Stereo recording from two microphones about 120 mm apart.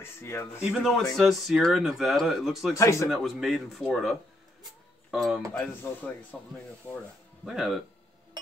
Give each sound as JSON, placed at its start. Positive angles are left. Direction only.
{"t": 0.0, "sound": "speech", "side_deg": 20}
{"t": 0.7, "sound": "speech", "side_deg": -5}
{"t": 2.7, "sound": "speech", "side_deg": 25}
{"t": 3.1, "sound": "speech", "side_deg": 0}
{"t": 5.5, "sound": "speech", "side_deg": 15}
{"t": 7.4, "sound": "speech", "side_deg": 0}